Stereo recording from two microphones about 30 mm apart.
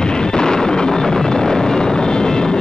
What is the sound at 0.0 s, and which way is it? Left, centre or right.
Vehicle, left.